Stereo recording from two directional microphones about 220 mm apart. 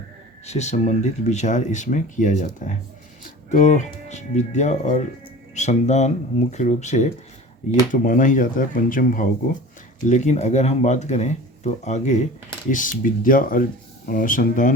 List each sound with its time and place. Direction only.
0.4 s speech: 30° left (ahead or behind)